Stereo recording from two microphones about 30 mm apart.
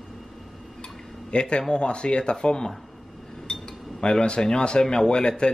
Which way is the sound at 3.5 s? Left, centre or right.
Centre.